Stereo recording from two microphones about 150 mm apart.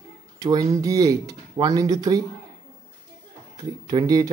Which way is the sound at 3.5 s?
25° right (ahead or behind).